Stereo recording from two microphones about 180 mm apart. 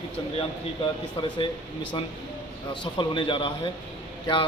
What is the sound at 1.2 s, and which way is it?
Speech, 30° left (ahead or behind).